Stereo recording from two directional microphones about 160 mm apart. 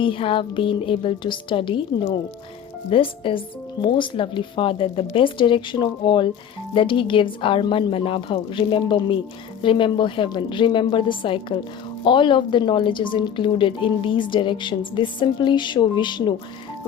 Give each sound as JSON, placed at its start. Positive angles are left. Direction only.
{"t": 0.0, "sound": "a woman's voice", "side_deg": 35}
{"t": 2.9, "sound": "a woman's voice", "side_deg": 35}